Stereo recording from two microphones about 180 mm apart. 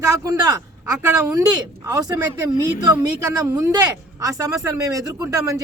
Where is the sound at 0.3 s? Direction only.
20° right (ahead or behind).